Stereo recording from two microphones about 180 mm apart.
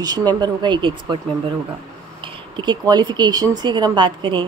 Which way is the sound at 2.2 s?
25° right (ahead or behind).